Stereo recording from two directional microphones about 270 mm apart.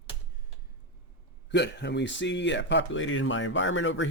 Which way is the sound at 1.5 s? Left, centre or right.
Left.